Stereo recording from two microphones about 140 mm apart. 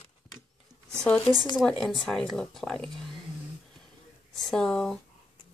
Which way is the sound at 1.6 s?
5° left (ahead or behind).